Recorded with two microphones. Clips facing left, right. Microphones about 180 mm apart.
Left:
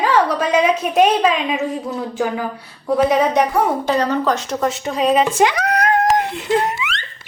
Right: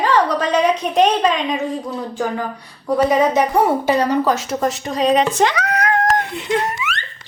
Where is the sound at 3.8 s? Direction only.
10° right (ahead or behind); by 5.6 s 10° left (ahead or behind).